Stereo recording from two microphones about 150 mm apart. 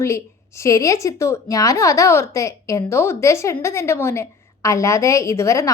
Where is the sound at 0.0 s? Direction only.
20° left (ahead or behind).